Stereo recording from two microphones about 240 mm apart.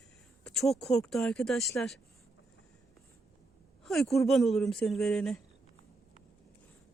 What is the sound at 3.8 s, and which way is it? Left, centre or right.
Speech, centre.